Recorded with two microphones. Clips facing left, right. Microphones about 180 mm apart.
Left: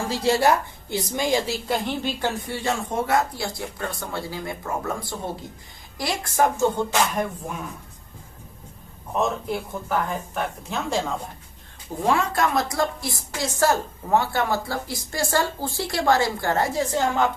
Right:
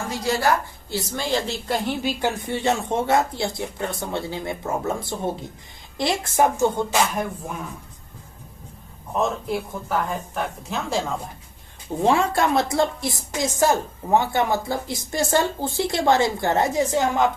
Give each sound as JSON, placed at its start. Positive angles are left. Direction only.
{"t": 0.1, "sound": "a woman's voice", "side_deg": 25}
{"t": 1.6, "sound": "speech", "side_deg": 0}
{"t": 2.5, "sound": "a woman's voice", "side_deg": -25}
{"t": 7.1, "sound": "speech", "side_deg": -5}
{"t": 9.1, "sound": "speech", "side_deg": 0}
{"t": 12.0, "sound": "a woman's voice", "side_deg": -25}